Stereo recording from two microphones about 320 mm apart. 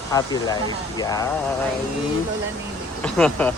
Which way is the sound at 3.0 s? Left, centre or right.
Centre.